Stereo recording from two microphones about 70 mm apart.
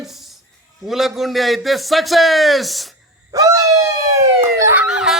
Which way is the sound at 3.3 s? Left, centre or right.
Right.